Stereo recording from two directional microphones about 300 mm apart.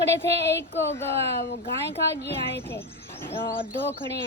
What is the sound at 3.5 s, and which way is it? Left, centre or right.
Speech, centre.